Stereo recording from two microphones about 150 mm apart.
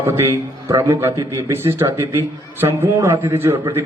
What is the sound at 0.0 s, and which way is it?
A man's voice, 15° right (ahead or behind).